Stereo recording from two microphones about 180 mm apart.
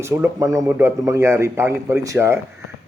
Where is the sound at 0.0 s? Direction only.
15° right (ahead or behind).